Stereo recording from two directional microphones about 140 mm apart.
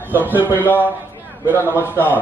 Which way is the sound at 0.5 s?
15° left (ahead or behind).